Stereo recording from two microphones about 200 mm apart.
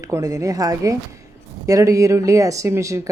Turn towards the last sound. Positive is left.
turn(degrees=-15)  # may be behind; listen again after turning